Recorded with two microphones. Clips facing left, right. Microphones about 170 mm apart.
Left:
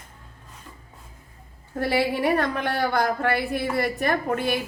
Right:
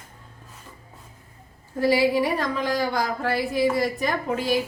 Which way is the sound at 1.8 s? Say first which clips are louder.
Right 3 dB; 60° left (ahead or behind).